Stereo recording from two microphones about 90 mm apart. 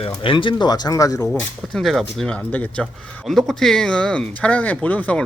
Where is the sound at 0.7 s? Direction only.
40° left (ahead or behind).